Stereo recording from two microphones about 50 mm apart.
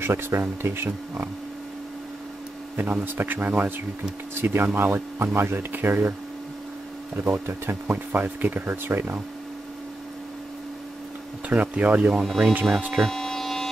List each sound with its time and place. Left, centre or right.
0.0 s speech: right
2.7 s speech: right
4.4 s speech: right
7.2 s speech: right
11.4 s speech: right
12.3 s speech: centre
12.9 s a sound: centre